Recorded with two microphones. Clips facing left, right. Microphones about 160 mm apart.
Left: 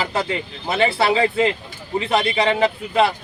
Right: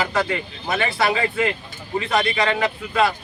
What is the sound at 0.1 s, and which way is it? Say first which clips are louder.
A man's voice: even; 25° left (ahead or behind).